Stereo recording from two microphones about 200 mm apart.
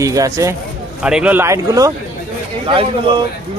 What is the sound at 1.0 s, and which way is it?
Speech, 5° right (ahead or behind).